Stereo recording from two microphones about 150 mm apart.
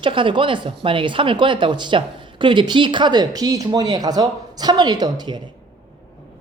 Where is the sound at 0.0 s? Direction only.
35° right (ahead or behind).